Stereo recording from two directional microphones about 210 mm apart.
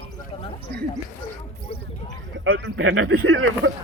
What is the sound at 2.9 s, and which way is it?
Speech, 90° right.